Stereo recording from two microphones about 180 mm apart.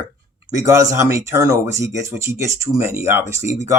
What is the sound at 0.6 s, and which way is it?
Speech, 15° right (ahead or behind).